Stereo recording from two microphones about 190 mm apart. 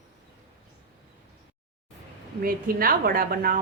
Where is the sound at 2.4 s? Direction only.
50° right (ahead or behind).